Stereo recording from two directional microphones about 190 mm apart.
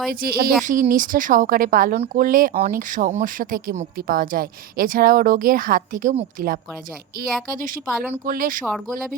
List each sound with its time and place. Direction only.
0.1 s speech: 50° right (ahead or behind)
8.7 s speech: centre (ahead or behind)